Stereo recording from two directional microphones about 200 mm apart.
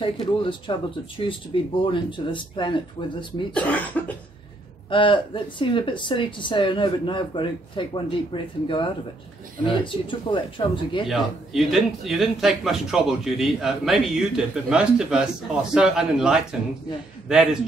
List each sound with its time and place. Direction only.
0.0 s speech: 25° left (ahead or behind)
3.5 s cough: 5° left (ahead or behind)
4.8 s speech: 25° left (ahead or behind)
11.1 s a man's voice: centre (ahead or behind)